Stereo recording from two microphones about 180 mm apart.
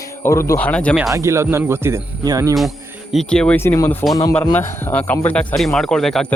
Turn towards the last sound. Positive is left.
turn(degrees=0)  # may be behind; listen again after turning